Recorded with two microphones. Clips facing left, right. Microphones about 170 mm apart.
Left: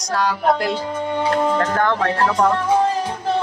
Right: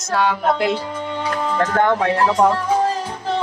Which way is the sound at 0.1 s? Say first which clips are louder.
Even; centre (ahead or behind).